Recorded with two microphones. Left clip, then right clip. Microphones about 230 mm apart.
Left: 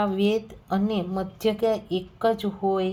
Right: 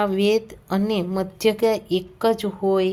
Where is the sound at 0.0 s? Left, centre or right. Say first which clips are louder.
Right 4 dB; right.